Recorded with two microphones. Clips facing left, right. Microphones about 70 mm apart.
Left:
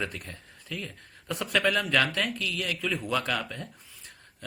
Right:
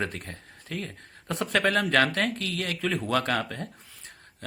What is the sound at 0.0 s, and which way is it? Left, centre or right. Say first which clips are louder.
Speech: right 2 dB; right.